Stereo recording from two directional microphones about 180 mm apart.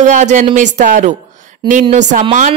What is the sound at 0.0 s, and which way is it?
A woman's voice, 40° right (ahead or behind).